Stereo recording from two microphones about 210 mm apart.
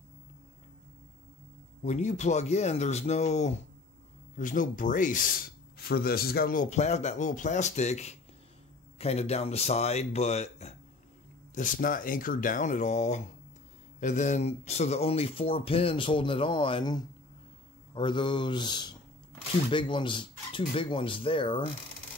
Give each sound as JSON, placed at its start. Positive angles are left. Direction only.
{"t": 1.8, "sound": "a man's voice", "side_deg": 35}